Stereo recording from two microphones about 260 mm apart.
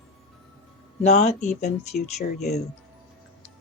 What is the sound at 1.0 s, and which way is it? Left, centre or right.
Speech, left.